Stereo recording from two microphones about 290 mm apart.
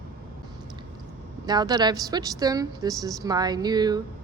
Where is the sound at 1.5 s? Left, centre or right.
Centre.